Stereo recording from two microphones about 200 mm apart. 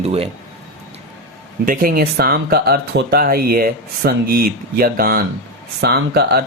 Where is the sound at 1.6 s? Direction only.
45° right (ahead or behind).